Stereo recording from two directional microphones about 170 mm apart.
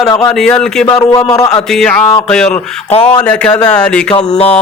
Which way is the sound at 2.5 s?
40° left (ahead or behind).